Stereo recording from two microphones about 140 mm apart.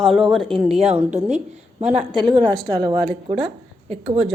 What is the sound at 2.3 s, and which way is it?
A woman's voice, 30° right (ahead or behind).